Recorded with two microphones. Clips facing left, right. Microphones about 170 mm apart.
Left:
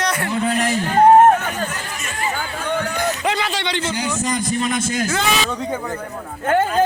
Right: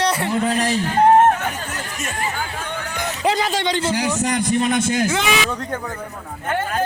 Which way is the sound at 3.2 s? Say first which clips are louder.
Right 2 dB; 40° right (ahead or behind).